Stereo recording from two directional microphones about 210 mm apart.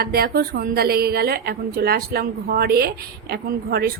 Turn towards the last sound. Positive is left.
turn(degrees=-45)  # may be behind; listen again after turning